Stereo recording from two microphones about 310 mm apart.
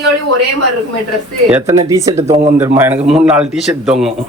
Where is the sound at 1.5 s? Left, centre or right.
Centre.